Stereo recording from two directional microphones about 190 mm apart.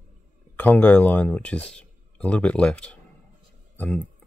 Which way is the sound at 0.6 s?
5° left (ahead or behind).